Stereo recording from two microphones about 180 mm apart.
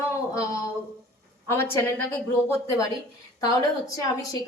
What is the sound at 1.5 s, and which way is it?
Speech, 15° left (ahead or behind).